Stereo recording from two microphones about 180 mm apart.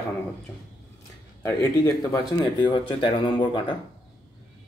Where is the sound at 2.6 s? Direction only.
25° left (ahead or behind).